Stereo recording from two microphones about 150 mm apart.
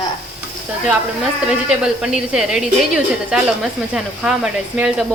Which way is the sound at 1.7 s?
5° right (ahead or behind).